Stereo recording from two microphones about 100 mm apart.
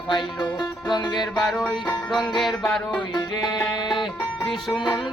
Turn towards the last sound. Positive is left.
turn(degrees=0)  # may be behind; listen again after turning